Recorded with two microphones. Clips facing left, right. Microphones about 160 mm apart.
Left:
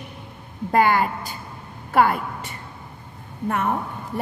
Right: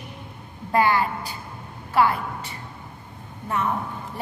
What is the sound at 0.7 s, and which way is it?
A woman's voice, 50° left (ahead or behind).